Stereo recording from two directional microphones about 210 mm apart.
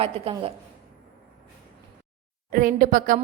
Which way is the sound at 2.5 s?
40° right (ahead or behind).